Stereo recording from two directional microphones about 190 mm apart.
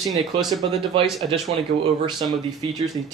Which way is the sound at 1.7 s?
70° right (ahead or behind).